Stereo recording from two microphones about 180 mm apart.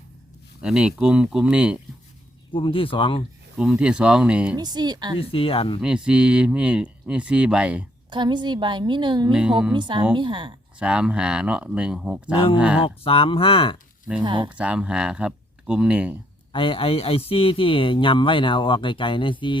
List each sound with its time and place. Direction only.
0.6 s speech: 5° right (ahead or behind)
2.5 s a man's voice: 30° left (ahead or behind)
3.6 s speech: 5° right (ahead or behind)
4.5 s a woman's voice: 25° right (ahead or behind)
5.3 s speech: 30° left (ahead or behind)
5.8 s speech: 5° right (ahead or behind)
8.1 s a woman's voice: 25° right (ahead or behind)
9.3 s speech: 5° right (ahead or behind)
9.7 s a woman's voice: 25° right (ahead or behind)
10.8 s speech: 5° right (ahead or behind)
13.1 s speech: 30° left (ahead or behind)
14.3 s a woman's voice: 25° right (ahead or behind)
14.5 s speech: 5° right (ahead or behind)
16.5 s a man's voice: 30° left (ahead or behind)